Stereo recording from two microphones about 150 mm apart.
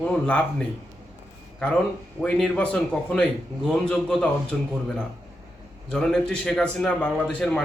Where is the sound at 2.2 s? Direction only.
5° left (ahead or behind).